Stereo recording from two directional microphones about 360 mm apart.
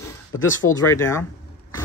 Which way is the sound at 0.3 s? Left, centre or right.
Left.